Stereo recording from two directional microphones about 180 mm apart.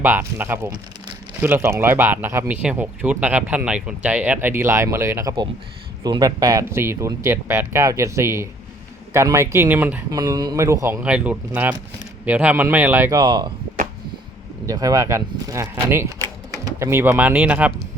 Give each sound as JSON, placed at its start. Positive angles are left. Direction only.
{"t": 0.0, "sound": "speech", "side_deg": -10}
{"t": 10.2, "sound": "speech", "side_deg": -20}
{"t": 11.0, "sound": "speech", "side_deg": -5}
{"t": 14.7, "sound": "speech", "side_deg": -20}